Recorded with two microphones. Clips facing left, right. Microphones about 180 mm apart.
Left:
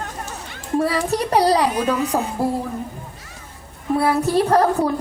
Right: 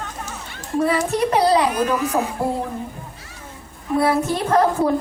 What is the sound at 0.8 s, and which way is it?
Speech, 35° left (ahead or behind).